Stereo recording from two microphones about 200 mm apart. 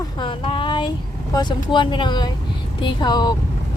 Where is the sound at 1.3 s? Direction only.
20° left (ahead or behind).